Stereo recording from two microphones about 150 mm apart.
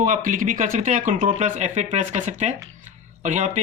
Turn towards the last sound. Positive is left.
turn(degrees=-55)  # may be behind; listen again after turning